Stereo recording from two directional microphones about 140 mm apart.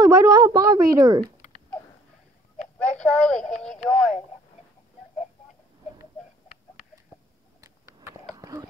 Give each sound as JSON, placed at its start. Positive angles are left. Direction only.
{"t": 0.0, "sound": "speech", "side_deg": -30}
{"t": 2.8, "sound": "speech", "side_deg": 10}
{"t": 7.6, "sound": "a sound", "side_deg": -20}
{"t": 8.4, "sound": "clip-clop", "side_deg": -25}